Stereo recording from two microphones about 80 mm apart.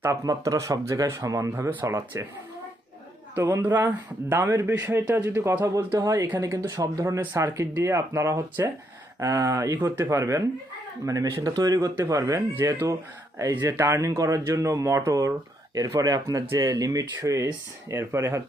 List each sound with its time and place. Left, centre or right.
0.0 s speech: right
3.3 s speech: right
3.6 s speech: right
12.5 s speech: right